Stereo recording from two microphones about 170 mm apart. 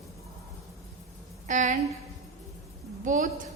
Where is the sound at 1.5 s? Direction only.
45° right (ahead or behind).